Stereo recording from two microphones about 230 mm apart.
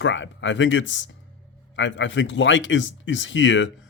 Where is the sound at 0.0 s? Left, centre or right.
Left.